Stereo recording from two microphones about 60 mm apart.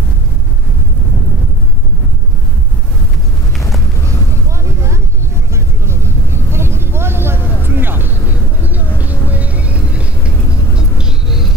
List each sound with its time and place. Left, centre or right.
4.6 s vehicle: right
9.3 s vehicle: right; by 11.4 s centre